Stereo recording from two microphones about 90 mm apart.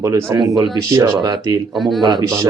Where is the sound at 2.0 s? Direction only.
55° right (ahead or behind).